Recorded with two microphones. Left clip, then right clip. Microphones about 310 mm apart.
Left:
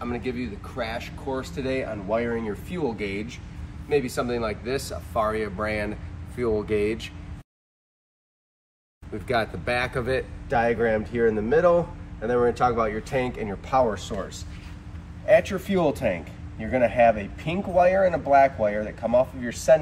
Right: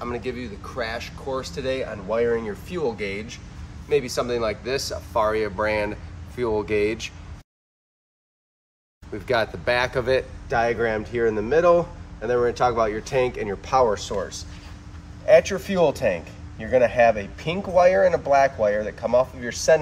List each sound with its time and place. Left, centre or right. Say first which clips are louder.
0.0 s speech: right 1 dB; centre
9.3 s speech: right 3 dB; centre
15.2 s speech: right 3 dB; right